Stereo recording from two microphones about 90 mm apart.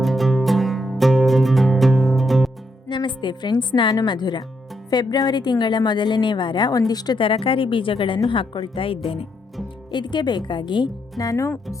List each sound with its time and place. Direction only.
0.0 s music: centre (ahead or behind)
3.2 s a woman's voice: 55° left (ahead or behind)
7.2 s speech: 85° left
9.9 s speech: 55° left (ahead or behind)
11.2 s speech: 40° left (ahead or behind)